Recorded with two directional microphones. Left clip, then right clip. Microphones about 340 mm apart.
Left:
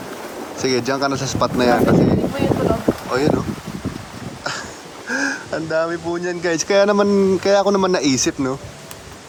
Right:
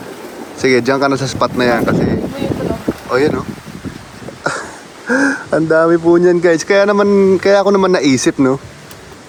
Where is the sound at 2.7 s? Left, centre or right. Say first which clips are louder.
Right 2 dB; centre.